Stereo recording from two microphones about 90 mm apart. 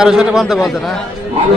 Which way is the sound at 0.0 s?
5° right (ahead or behind).